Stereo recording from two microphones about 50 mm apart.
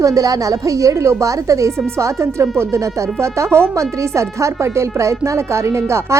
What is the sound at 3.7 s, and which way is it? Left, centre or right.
Speech, right.